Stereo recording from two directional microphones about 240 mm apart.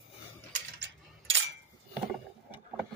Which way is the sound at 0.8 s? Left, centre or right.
Right.